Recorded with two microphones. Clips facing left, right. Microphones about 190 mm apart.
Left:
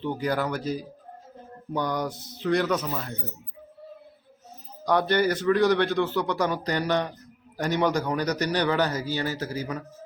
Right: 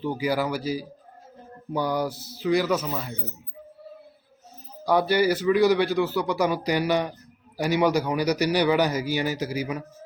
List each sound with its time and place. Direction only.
0.0 s a man's voice: 5° right (ahead or behind)
4.9 s a man's voice: 5° right (ahead or behind)